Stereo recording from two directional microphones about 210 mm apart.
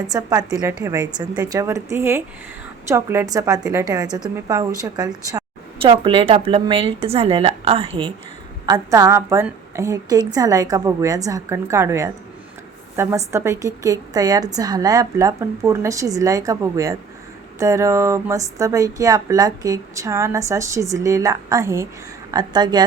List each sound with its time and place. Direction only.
0.1 s speech: 15° right (ahead or behind)